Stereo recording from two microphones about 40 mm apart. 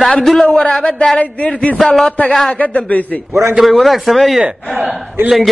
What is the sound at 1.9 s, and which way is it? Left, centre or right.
Speech, centre.